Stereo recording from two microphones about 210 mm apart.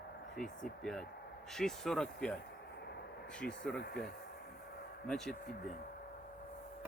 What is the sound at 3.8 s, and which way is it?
Speech, 50° left (ahead or behind).